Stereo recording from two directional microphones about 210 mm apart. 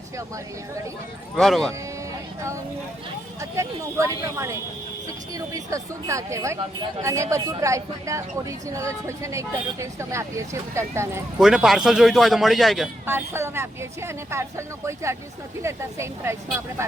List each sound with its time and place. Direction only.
1.4 s a man's voice: centre (ahead or behind)
3.5 s speech: 15° right (ahead or behind)
11.3 s a man's voice: centre (ahead or behind)
13.1 s speech: 10° right (ahead or behind)